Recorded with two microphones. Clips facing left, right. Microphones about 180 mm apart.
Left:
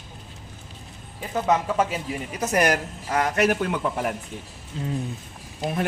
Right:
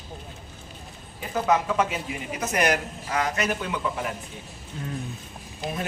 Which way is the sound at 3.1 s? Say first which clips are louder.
Left 5 dB; 55° left (ahead or behind).